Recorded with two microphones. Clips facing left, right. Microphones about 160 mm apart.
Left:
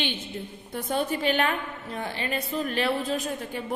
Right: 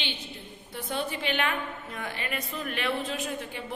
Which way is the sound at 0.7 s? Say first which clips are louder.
Left 5 dB; 45° left (ahead or behind).